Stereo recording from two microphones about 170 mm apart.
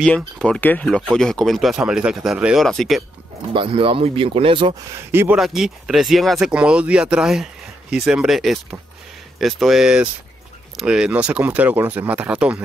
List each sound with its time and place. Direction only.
0.0 s speech: 5° left (ahead or behind)
3.5 s speech: 30° right (ahead or behind)
5.1 s speech: 15° right (ahead or behind)
5.4 s speech: centre (ahead or behind)